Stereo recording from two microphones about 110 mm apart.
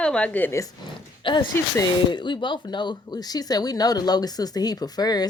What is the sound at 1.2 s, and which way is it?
Speech, 50° left (ahead or behind).